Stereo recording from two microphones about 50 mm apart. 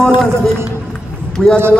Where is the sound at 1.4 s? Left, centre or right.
Centre.